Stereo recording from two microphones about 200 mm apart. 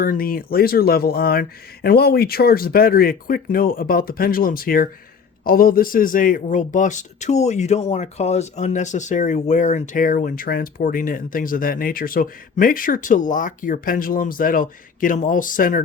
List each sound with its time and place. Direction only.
0.0 s a man's voice: 45° left (ahead or behind)